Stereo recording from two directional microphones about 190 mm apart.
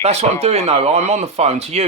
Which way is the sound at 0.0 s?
35° right (ahead or behind).